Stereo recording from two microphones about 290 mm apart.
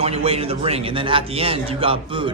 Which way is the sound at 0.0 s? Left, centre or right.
Centre.